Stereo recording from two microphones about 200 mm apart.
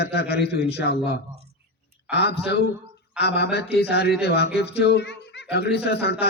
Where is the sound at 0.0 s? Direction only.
55° left (ahead or behind).